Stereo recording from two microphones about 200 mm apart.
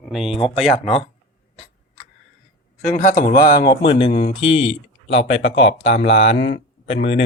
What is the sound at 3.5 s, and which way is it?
Speech, 20° left (ahead or behind).